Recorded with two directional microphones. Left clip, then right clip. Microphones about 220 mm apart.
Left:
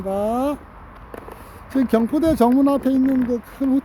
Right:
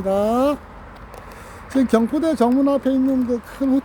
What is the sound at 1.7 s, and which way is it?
Speech, 15° left (ahead or behind).